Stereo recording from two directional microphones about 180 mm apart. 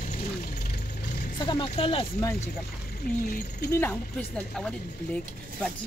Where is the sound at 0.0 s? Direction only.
45° left (ahead or behind).